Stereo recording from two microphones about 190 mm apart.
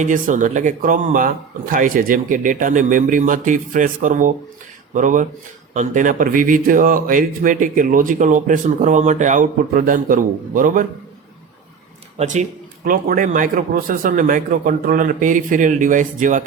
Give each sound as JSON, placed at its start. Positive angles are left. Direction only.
{"t": 0.0, "sound": "speech", "side_deg": -40}
{"t": 12.1, "sound": "speech", "side_deg": -40}